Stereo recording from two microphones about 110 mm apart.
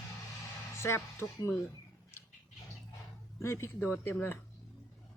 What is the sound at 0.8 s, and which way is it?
Speech, 20° left (ahead or behind).